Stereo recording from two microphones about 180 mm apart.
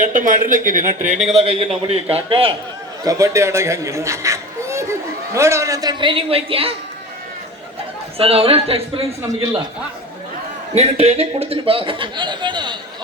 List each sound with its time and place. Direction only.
0.0 s speech: 45° right (ahead or behind)
3.0 s a man's voice: 20° right (ahead or behind)
8.2 s a man's voice: 35° right (ahead or behind)
10.8 s a man's voice: 35° right (ahead or behind)